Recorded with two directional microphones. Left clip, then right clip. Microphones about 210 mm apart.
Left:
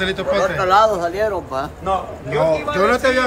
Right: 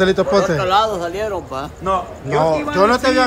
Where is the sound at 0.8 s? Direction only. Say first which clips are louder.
Left 3 dB; centre (ahead or behind).